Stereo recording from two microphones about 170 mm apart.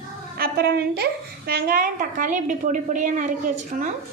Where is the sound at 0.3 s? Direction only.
65° right (ahead or behind).